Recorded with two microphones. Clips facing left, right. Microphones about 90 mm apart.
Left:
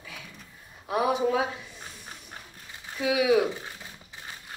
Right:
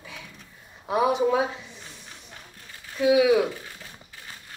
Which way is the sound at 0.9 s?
25° right (ahead or behind).